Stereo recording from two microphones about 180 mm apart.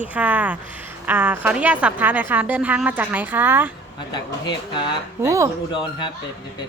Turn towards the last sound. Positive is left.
turn(degrees=25)  # may be behind; listen again after turning